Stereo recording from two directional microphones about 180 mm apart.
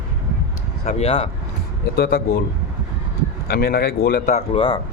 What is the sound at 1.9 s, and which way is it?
Speech, 55° left (ahead or behind).